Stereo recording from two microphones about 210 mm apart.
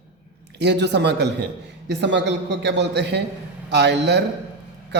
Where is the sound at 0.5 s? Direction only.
55° right (ahead or behind).